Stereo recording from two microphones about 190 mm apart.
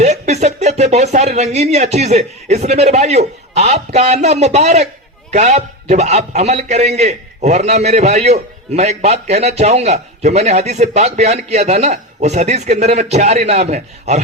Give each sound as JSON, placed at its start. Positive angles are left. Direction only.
{"t": 0.0, "sound": "a man's voice", "side_deg": -35}